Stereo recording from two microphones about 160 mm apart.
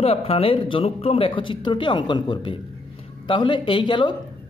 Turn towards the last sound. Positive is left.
turn(degrees=30)  # may be behind; listen again after turning